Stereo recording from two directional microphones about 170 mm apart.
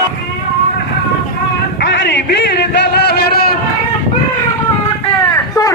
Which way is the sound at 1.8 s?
90° left.